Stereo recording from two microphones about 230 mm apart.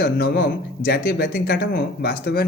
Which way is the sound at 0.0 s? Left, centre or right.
Left.